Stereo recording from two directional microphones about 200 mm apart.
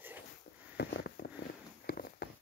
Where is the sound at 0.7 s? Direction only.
55° left (ahead or behind).